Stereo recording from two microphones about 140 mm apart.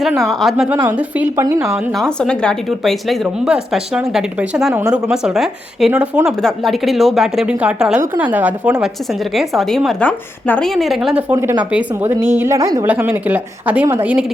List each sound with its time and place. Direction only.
0.2 s speech: centre (ahead or behind)
1.9 s speech: 5° left (ahead or behind)
11.2 s a woman's voice: 15° right (ahead or behind)
12.9 s speech: 10° right (ahead or behind)